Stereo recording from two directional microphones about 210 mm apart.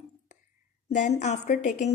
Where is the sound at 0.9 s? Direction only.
35° left (ahead or behind).